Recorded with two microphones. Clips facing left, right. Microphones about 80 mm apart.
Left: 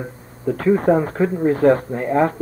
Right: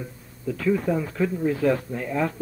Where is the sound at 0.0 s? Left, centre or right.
Left.